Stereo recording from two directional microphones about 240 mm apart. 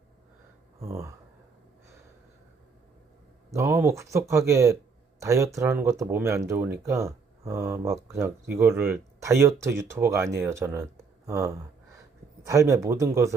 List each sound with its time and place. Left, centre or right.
0.8 s speech: centre
3.5 s speech: centre